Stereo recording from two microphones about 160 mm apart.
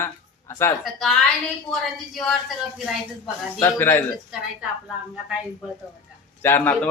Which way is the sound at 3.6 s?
15° left (ahead or behind).